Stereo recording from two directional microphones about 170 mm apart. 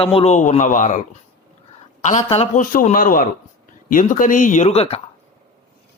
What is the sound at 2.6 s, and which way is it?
A man's voice, 55° left (ahead or behind).